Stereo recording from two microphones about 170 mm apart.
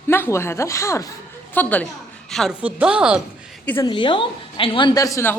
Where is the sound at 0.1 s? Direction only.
15° left (ahead or behind).